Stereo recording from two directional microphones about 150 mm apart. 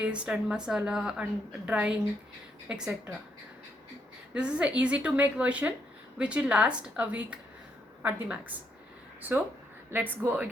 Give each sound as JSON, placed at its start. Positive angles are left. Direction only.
{"t": 0.0, "sound": "a woman's voice", "side_deg": -5}
{"t": 4.4, "sound": "a woman's voice", "side_deg": -5}
{"t": 9.9, "sound": "a woman's voice", "side_deg": -15}